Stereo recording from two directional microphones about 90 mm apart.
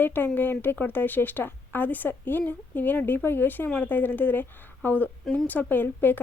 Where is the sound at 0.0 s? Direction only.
20° left (ahead or behind).